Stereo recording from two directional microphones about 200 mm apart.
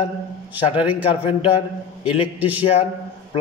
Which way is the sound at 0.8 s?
5° right (ahead or behind).